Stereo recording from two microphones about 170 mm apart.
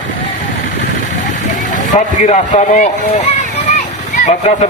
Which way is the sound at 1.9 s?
45° left (ahead or behind).